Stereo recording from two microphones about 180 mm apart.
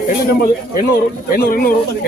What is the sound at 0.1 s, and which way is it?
Speech, 55° left (ahead or behind).